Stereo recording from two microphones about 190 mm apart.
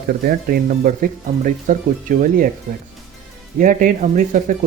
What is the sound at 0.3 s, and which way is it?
Speech, 50° right (ahead or behind).